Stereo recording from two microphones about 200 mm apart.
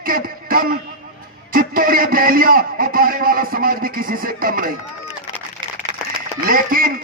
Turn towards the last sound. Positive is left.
turn(degrees=-45)  # may be behind; listen again after turning